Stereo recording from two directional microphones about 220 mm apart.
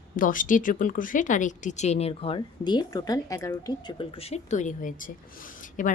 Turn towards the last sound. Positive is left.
turn(degrees=35)  # may be behind; listen again after turning